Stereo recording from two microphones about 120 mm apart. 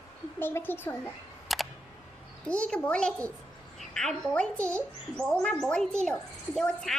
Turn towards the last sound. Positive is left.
turn(degrees=5)  # may be behind; listen again after turning